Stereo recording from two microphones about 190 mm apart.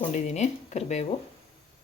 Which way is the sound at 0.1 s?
35° left (ahead or behind).